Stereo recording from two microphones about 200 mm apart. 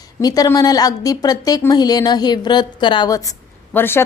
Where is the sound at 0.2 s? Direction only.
20° left (ahead or behind).